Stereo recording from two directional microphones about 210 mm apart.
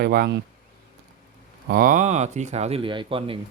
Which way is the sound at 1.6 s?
40° right (ahead or behind).